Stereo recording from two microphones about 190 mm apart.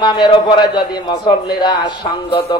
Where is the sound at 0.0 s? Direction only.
25° left (ahead or behind).